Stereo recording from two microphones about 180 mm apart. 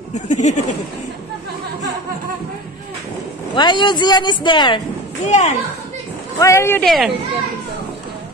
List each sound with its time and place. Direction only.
0.1 s speech: 40° left (ahead or behind)
3.5 s speech: 25° left (ahead or behind)
5.2 s speech: 40° left (ahead or behind)
6.4 s speech: 15° left (ahead or behind)
6.8 s speech: centre (ahead or behind)